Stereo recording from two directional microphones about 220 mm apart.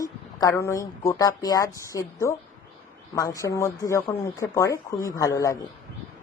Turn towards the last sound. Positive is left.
turn(degrees=15)  # may be behind; listen again after turning